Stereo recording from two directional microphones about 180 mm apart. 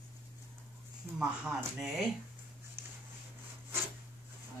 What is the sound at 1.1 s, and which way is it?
Mantra, centre (ahead or behind).